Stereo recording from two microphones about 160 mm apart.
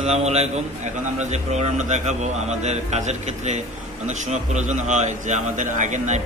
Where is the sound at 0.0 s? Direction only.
40° right (ahead or behind).